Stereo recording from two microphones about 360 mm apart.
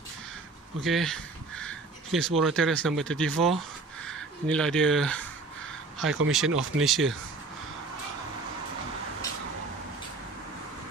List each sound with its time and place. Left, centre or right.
0.8 s speech: centre
6.0 s speech: right
6.3 s speech: centre